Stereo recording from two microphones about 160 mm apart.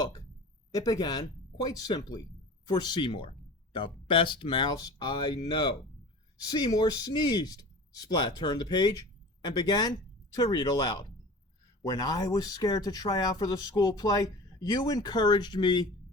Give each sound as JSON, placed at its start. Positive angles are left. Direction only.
{"t": 0.7, "sound": "speech", "side_deg": 20}